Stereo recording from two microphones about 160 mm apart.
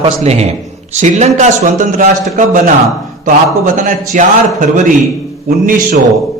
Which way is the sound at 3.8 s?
55° right (ahead or behind).